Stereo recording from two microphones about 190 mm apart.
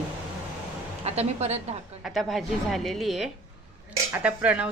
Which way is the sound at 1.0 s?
35° right (ahead or behind).